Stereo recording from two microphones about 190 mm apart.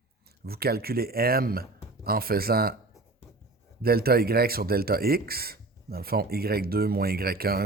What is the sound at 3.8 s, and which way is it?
Speech, 55° right (ahead or behind).